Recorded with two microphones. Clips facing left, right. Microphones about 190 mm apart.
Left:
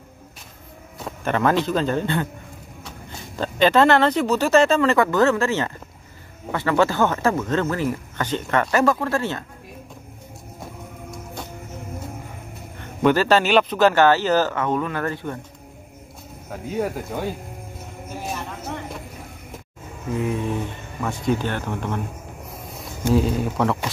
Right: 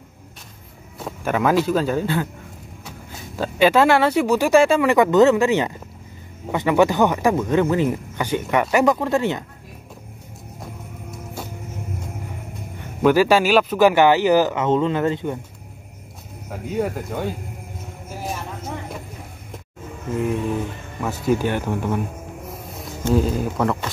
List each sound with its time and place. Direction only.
1.0 s speech: 5° right (ahead or behind)
3.3 s speech: 10° right (ahead or behind)
13.0 s speech: 10° right (ahead or behind)
16.8 s speech: centre (ahead or behind)
20.2 s speech: centre (ahead or behind)
23.1 s speech: centre (ahead or behind)